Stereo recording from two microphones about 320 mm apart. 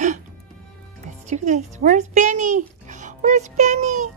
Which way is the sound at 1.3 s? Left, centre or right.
Right.